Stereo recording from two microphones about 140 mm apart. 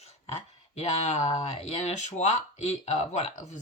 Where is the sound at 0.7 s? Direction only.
50° left (ahead or behind).